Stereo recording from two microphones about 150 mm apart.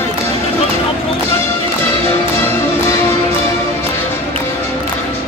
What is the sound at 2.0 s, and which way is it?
Music, 15° left (ahead or behind).